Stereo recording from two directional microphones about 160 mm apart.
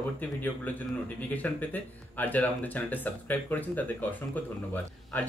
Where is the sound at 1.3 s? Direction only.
10° left (ahead or behind).